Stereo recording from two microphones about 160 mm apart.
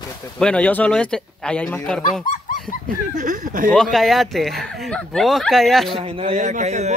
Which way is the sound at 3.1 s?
55° right (ahead or behind).